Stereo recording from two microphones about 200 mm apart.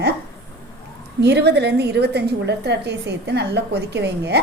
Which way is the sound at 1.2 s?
55° right (ahead or behind).